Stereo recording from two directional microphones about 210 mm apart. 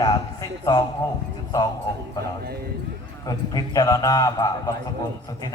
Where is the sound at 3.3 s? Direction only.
15° left (ahead or behind).